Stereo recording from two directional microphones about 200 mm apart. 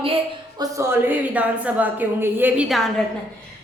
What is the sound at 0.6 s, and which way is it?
Speech, 15° right (ahead or behind).